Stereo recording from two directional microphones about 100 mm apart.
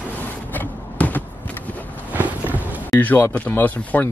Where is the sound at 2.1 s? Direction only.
15° right (ahead or behind).